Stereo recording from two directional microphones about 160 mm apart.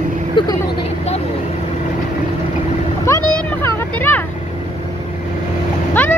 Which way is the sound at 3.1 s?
15° left (ahead or behind).